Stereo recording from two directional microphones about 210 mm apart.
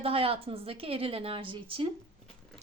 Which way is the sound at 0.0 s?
25° right (ahead or behind).